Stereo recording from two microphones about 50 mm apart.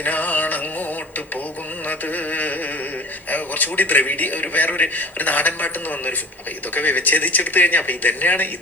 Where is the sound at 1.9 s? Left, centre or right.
Left.